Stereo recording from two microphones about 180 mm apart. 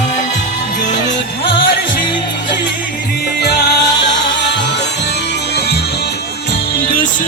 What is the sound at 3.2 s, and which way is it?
Music, 65° left (ahead or behind).